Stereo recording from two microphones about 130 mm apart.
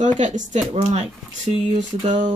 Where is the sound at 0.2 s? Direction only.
65° right (ahead or behind).